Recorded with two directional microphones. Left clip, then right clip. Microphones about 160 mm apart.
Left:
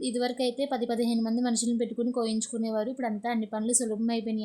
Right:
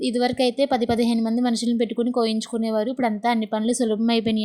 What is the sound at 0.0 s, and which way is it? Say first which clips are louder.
A woman's voice: right 7 dB; 30° right (ahead or behind).